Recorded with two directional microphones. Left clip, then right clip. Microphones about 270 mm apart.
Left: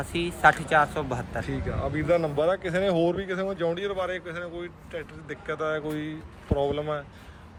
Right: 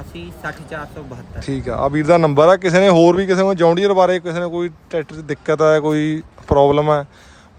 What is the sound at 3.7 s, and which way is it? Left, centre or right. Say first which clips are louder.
Speech: right 16 dB; centre.